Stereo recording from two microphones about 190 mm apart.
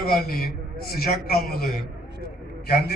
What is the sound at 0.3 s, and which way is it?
A man's voice, 55° left (ahead or behind).